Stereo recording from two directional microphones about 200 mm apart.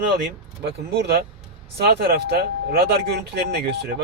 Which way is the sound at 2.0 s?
50° right (ahead or behind).